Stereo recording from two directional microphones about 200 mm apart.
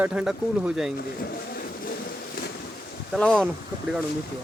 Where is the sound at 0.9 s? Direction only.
50° left (ahead or behind).